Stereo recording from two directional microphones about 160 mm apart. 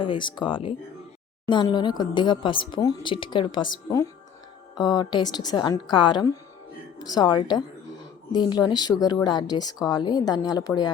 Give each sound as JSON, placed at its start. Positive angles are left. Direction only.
{"t": 0.0, "sound": "speech", "side_deg": 30}